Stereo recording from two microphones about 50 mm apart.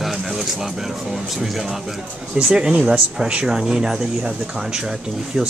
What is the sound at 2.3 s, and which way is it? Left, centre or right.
Speech, centre.